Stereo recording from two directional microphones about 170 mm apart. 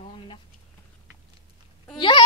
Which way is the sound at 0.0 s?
30° left (ahead or behind).